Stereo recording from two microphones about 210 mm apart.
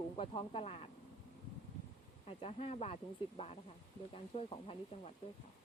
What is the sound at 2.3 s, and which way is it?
Speech, 25° left (ahead or behind).